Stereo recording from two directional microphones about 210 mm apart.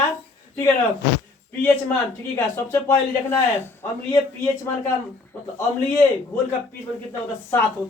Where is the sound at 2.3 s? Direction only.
10° left (ahead or behind).